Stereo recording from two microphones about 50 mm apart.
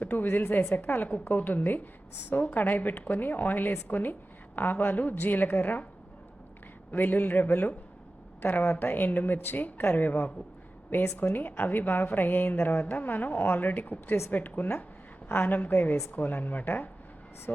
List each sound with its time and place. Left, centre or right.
0.0 s a woman's voice: left
6.9 s a woman's voice: left